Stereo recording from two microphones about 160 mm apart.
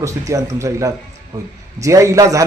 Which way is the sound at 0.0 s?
20° right (ahead or behind).